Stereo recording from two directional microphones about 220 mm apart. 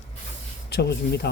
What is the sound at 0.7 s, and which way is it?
Speech, 50° left (ahead or behind).